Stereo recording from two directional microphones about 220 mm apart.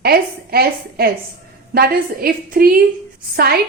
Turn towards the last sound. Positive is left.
turn(degrees=-45)  # may be behind; listen again after turning